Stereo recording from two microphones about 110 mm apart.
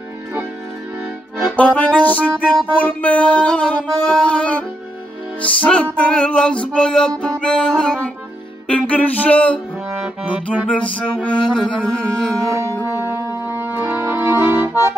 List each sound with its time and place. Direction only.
1.6 s music: 15° left (ahead or behind)
10.7 s music: 10° left (ahead or behind)
12.8 s music: 20° right (ahead or behind)